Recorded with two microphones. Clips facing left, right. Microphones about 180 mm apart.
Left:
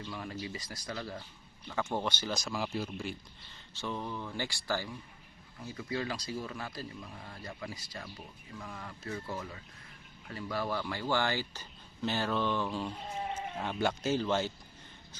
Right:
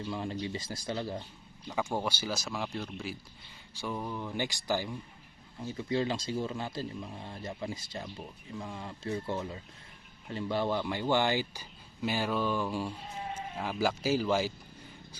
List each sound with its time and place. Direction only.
0.1 s speech: 25° right (ahead or behind)
1.6 s speech: 10° right (ahead or behind)
3.8 s speech: 10° right (ahead or behind)